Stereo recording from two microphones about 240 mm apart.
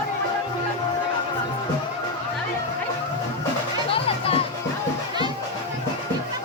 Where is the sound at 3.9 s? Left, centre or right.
Left.